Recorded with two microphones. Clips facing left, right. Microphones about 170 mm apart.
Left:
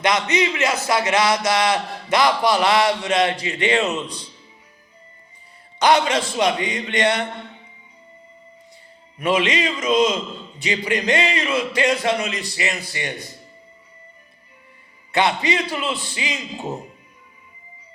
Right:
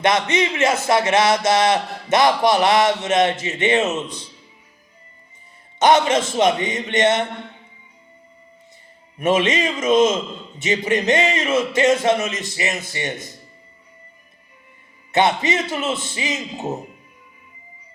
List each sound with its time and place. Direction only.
0.0 s speech: 25° right (ahead or behind)
5.8 s speech: 25° right (ahead or behind)
9.2 s speech: 25° right (ahead or behind)
9.6 s speech: 50° right (ahead or behind)
10.6 s speech: 25° right (ahead or behind)
15.1 s speech: 20° right (ahead or behind)